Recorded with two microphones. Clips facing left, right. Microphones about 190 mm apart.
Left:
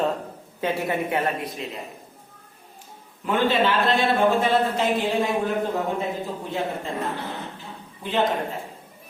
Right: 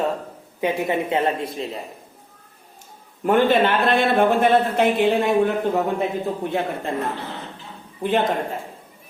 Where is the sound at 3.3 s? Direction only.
50° right (ahead or behind).